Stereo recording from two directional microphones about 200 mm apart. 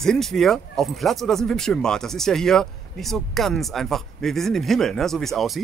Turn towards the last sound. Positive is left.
turn(degrees=0)  # may be behind; listen again after turning